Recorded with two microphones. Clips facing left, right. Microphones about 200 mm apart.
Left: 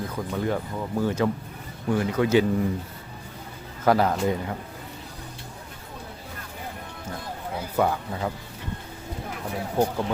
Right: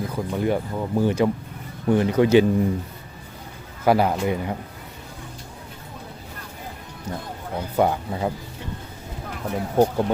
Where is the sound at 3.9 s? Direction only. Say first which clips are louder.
Right 2 dB; 10° right (ahead or behind).